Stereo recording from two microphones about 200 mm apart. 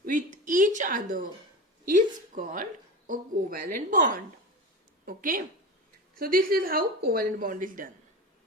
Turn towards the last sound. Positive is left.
turn(degrees=-45)  # may be behind; listen again after turning